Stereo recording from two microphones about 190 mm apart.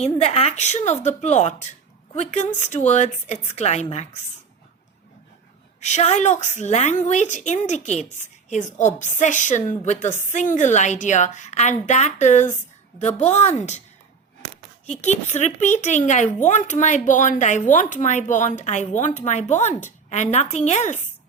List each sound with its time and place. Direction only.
0.0 s speech: 35° left (ahead or behind)
5.8 s speech: 35° left (ahead or behind)
14.8 s speech: 35° left (ahead or behind)